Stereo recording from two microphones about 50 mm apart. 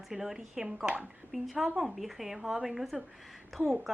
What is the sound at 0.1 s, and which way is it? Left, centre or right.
A woman's voice, centre.